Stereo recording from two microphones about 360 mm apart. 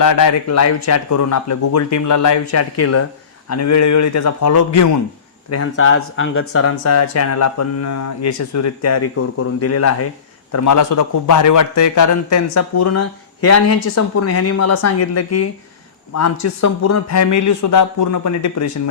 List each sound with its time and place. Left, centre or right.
0.0 s speech: left
5.5 s a man's voice: left